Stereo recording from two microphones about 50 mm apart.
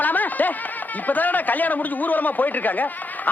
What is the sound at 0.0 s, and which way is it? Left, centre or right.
Speech, left.